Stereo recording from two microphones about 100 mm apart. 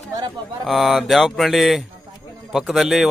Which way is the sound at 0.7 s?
Centre (ahead or behind).